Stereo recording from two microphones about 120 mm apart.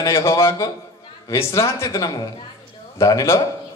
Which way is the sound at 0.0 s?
25° left (ahead or behind).